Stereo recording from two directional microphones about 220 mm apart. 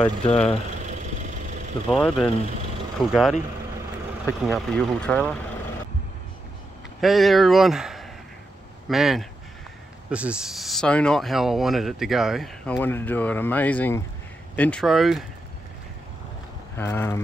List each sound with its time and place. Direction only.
0.0 s speech: 25° left (ahead or behind)
0.8 s vehicle: 35° right (ahead or behind)
1.9 s speech: 5° left (ahead or behind)
7.0 s speech: centre (ahead or behind)
12.7 s speech: 10° left (ahead or behind)
16.7 s speech: 10° left (ahead or behind)